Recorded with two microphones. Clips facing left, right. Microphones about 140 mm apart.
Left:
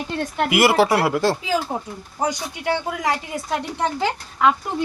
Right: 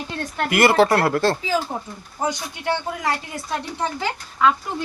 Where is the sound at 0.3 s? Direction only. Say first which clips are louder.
Even; 10° left (ahead or behind).